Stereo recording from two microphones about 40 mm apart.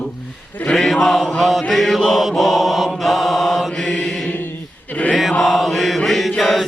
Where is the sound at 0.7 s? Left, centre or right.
Centre.